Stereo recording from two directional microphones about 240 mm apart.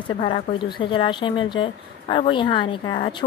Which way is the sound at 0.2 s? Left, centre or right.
Left.